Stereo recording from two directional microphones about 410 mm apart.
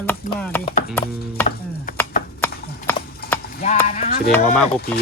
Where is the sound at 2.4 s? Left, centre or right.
Centre.